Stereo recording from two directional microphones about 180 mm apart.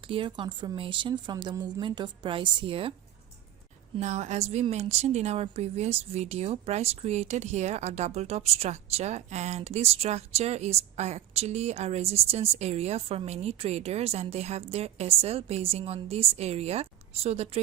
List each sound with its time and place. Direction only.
0.0 s a woman's voice: 30° right (ahead or behind)
4.0 s a woman's voice: 40° right (ahead or behind)